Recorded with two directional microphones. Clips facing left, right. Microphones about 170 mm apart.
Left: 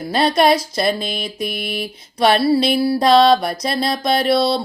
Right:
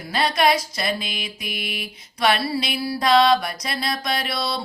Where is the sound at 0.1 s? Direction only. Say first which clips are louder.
Left 5 dB; 35° left (ahead or behind).